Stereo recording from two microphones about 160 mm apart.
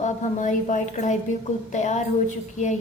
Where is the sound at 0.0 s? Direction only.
50° left (ahead or behind).